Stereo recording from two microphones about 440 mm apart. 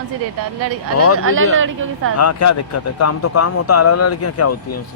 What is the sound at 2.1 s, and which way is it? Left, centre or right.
Speech, left.